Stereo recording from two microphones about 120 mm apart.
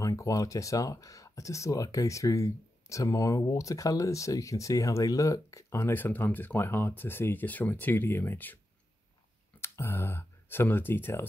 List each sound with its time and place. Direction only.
0.0 s speech: 25° left (ahead or behind)
9.6 s speech: 20° left (ahead or behind)